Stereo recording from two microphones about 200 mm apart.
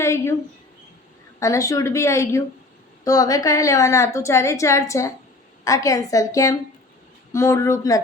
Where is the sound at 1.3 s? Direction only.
15° left (ahead or behind).